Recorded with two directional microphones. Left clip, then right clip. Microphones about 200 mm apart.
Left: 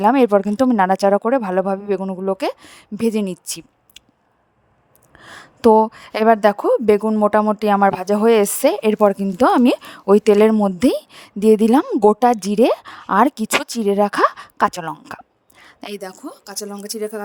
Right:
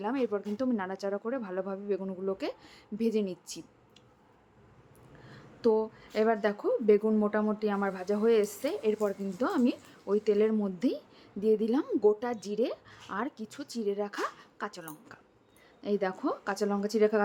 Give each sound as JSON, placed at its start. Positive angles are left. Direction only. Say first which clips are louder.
{"t": 0.0, "sound": "speech", "louder": "left 18 dB", "side_deg": 55}
{"t": 5.2, "sound": "speech", "louder": "left 14 dB", "side_deg": 55}
{"t": 16.0, "sound": "speech", "louder": "right 1 dB", "side_deg": 0}